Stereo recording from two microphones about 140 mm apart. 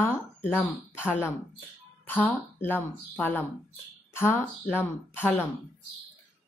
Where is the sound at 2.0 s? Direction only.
15° left (ahead or behind).